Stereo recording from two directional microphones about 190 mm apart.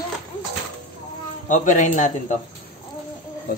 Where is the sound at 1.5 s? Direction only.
40° left (ahead or behind).